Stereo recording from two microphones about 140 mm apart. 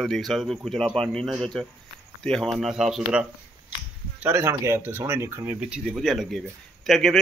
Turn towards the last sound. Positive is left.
turn(degrees=0)  # may be behind; listen again after turning